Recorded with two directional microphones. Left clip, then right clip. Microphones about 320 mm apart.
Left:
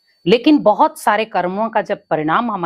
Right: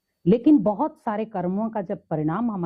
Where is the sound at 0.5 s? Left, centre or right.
Centre.